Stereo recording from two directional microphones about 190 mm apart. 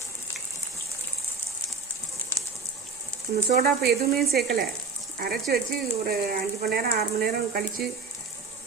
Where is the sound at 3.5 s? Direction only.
55° right (ahead or behind).